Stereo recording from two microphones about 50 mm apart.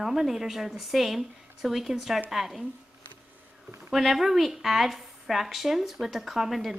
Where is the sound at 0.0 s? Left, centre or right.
Centre.